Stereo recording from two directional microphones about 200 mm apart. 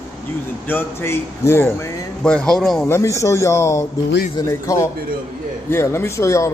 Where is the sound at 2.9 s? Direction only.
15° left (ahead or behind).